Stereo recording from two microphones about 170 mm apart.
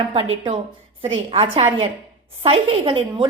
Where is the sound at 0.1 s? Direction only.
30° right (ahead or behind).